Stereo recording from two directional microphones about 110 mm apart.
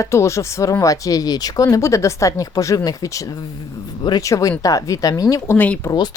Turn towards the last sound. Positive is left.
turn(degrees=15)  # may be behind; listen again after turning